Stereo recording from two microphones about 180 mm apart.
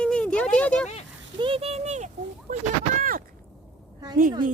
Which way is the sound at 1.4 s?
30° right (ahead or behind).